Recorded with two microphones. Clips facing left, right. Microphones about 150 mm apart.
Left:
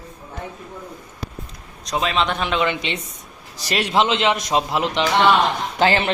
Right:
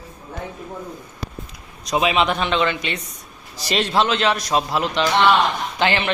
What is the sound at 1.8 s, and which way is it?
Speech, 10° right (ahead or behind).